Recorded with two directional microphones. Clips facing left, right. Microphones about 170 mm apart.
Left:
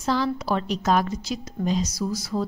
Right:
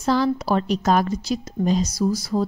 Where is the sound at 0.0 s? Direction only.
40° right (ahead or behind).